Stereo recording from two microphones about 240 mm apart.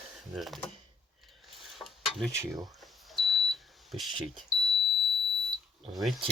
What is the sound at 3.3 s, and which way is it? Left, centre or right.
Smoke detector, centre.